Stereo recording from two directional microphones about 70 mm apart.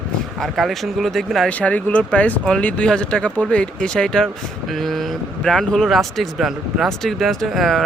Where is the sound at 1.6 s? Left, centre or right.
Left.